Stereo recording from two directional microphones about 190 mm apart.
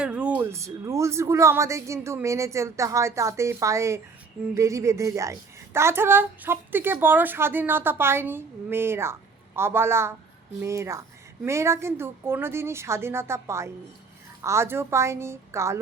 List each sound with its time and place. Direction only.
0.0 s a woman's voice: 5° right (ahead or behind)